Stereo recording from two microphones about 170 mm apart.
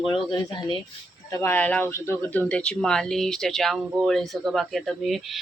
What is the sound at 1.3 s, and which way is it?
Speech, 15° left (ahead or behind).